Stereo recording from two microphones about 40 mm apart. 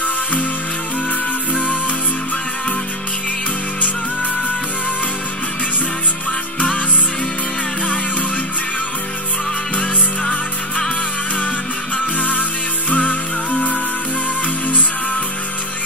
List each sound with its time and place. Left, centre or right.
12.2 s music: left